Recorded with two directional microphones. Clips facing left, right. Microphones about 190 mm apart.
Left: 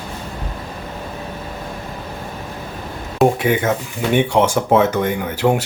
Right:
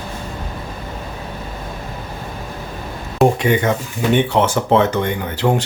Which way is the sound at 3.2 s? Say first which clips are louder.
Right 1 dB; 5° left (ahead or behind).